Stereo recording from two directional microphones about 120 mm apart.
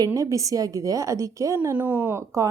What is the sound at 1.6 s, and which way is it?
Speech, 15° right (ahead or behind).